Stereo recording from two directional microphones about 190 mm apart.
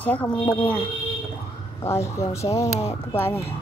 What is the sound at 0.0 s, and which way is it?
Speech, 10° left (ahead or behind).